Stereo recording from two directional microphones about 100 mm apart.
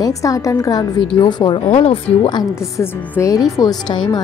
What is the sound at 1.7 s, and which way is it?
Speech, 70° left (ahead or behind).